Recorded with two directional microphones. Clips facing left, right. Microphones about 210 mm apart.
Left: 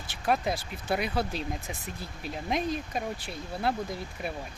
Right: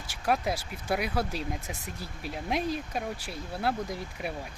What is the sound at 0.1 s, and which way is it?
Speech, 10° right (ahead or behind).